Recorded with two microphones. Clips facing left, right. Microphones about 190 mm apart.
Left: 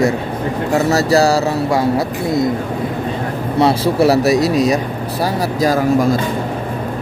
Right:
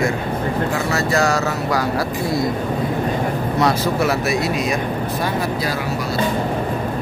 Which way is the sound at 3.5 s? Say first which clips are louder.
Left 6 dB; 30° left (ahead or behind).